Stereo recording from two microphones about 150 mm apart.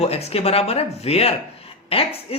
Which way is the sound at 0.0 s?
45° left (ahead or behind).